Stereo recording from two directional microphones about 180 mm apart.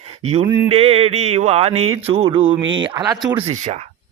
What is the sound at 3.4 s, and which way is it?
Speech, 40° right (ahead or behind).